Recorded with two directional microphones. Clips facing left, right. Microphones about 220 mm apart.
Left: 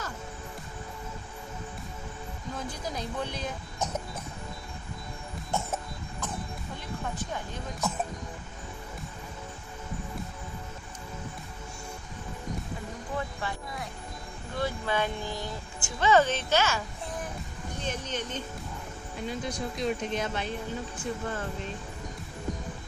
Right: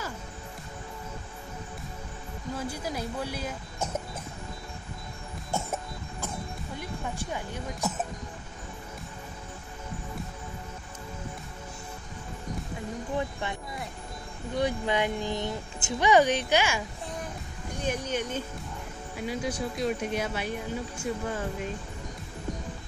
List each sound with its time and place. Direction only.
2.7 s speech: 10° right (ahead or behind)
7.2 s speech: 10° right (ahead or behind)
14.5 s speech: 20° right (ahead or behind)
17.8 s speech: 10° right (ahead or behind)